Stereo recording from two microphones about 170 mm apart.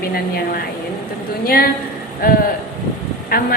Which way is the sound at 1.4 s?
60° left (ahead or behind).